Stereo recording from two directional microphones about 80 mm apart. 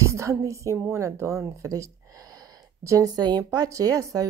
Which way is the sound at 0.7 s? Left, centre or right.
Right.